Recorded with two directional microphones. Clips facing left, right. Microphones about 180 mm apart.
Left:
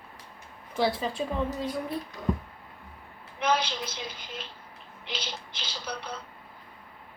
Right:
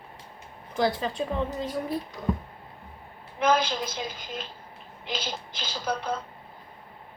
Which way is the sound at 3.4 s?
45° right (ahead or behind).